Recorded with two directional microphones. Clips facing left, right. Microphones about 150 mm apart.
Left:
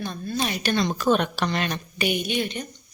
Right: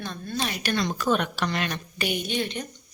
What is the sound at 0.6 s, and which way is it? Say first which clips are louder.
Speech: left 3 dB; 25° left (ahead or behind).